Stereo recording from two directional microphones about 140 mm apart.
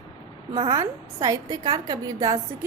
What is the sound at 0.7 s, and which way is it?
A woman's voice, 20° right (ahead or behind).